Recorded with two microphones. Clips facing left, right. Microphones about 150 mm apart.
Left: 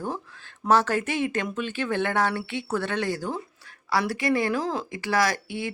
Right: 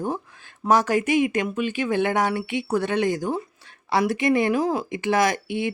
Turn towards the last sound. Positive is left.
turn(degrees=-20)  # may be behind; listen again after turning